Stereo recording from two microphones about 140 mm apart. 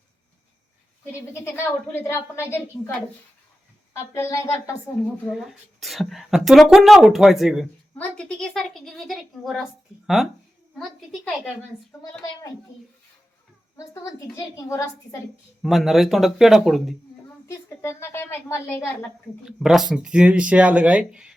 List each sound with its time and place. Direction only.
1.3 s a woman's voice: 20° left (ahead or behind)
3.9 s a woman's voice: 20° left (ahead or behind)
5.3 s speech: centre (ahead or behind)
13.7 s a woman's voice: 25° left (ahead or behind)
15.6 s speech: centre (ahead or behind)
17.2 s a woman's voice: 20° left (ahead or behind)
19.5 s speech: 5° right (ahead or behind)